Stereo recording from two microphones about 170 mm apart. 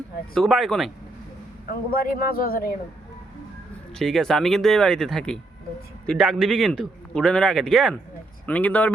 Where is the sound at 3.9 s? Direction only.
5° left (ahead or behind).